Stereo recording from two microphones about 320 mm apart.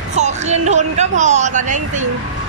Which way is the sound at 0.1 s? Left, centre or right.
Right.